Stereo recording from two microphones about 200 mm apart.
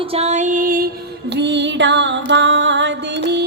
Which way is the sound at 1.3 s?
60° right (ahead or behind).